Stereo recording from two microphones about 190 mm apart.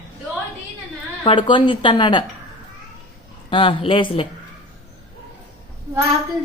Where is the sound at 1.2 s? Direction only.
25° left (ahead or behind).